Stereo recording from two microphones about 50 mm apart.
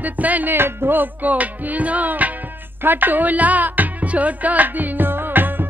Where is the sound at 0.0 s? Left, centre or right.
Right.